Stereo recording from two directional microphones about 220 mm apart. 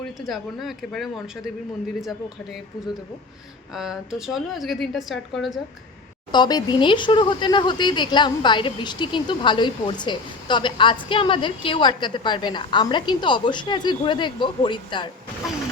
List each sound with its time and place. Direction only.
0.3 s a woman's voice: centre (ahead or behind)
6.3 s speech: 20° left (ahead or behind)